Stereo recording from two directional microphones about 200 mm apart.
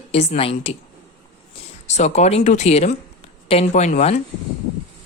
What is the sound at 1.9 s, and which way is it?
Speech, 35° left (ahead or behind).